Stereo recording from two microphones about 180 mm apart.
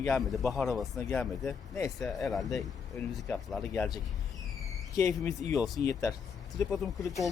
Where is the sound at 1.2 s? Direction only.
10° left (ahead or behind).